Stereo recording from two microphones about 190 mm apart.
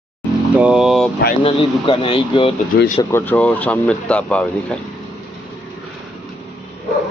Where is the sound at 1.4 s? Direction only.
25° left (ahead or behind).